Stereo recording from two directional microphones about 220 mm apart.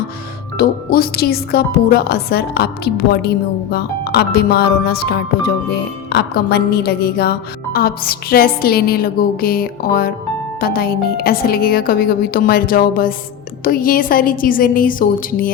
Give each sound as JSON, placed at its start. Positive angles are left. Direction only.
{"t": 0.5, "sound": "a woman's voice", "side_deg": 40}